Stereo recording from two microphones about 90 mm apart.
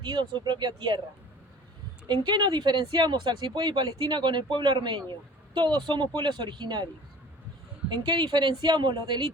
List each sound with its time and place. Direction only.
0.0 s speech: 60° right (ahead or behind)
2.2 s speech: 55° right (ahead or behind)
7.9 s speech: 55° right (ahead or behind)